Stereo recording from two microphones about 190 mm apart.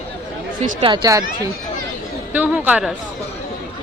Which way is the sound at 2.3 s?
10° right (ahead or behind).